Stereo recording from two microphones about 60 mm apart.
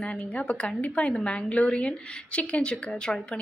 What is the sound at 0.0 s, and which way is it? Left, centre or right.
A woman's voice, centre.